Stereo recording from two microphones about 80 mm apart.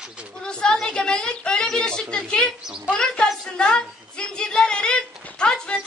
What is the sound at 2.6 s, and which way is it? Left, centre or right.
Speech, centre.